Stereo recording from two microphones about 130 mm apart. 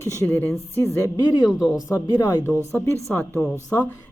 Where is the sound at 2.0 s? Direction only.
25° left (ahead or behind).